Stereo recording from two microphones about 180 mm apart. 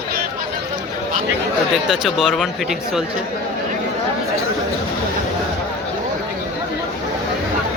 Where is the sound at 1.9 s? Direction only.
Centre (ahead or behind).